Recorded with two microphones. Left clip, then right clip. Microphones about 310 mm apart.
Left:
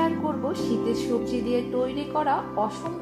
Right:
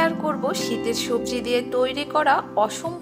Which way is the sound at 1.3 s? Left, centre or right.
Right.